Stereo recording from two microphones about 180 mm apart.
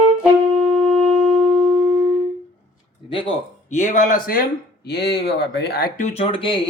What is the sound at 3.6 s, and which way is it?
Speech, 40° left (ahead or behind).